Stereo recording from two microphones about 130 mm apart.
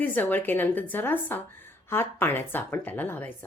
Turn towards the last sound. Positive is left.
turn(degrees=15)  # may be behind; listen again after turning